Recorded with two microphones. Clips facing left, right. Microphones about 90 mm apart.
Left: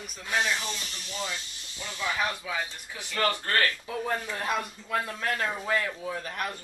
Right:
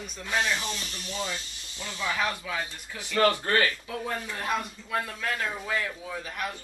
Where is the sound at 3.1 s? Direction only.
15° right (ahead or behind).